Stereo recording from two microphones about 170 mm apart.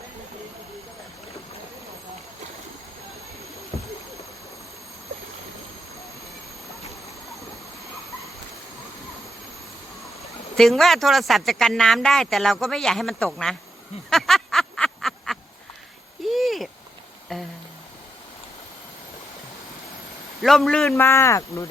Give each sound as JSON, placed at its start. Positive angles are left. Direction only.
{"t": 10.6, "sound": "speech", "side_deg": 0}
{"t": 14.1, "sound": "a sound", "side_deg": 0}
{"t": 20.4, "sound": "speech", "side_deg": 0}
{"t": 20.9, "sound": "speech", "side_deg": 15}